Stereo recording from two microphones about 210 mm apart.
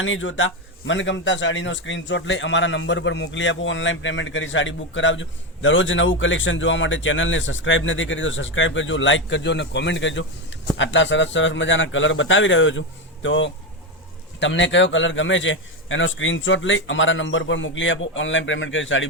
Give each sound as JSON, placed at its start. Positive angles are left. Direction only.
{"t": 0.0, "sound": "speech", "side_deg": 65}